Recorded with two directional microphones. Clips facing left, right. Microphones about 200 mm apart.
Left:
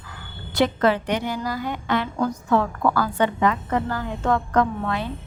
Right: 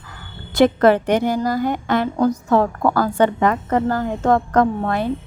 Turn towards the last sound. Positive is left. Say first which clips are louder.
# right 5 dB
turn(degrees=-45)  # may be behind; listen again after turning